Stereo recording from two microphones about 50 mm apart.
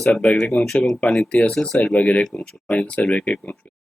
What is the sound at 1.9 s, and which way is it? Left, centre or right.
Speech, left.